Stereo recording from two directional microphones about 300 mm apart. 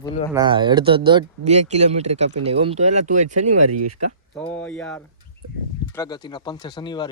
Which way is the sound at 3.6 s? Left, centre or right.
Right.